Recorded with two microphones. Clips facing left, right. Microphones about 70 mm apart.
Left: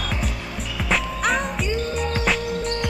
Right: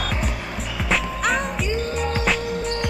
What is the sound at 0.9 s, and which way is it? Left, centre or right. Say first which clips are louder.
Music: even; centre.